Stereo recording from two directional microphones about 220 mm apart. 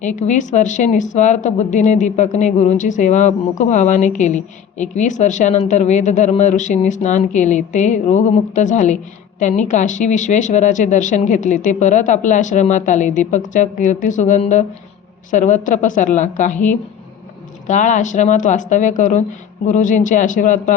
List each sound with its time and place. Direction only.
0.0 s a woman's voice: 35° left (ahead or behind)
17.7 s a woman's voice: 35° left (ahead or behind)